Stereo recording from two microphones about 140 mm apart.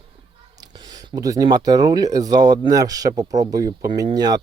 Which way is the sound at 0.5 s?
30° right (ahead or behind).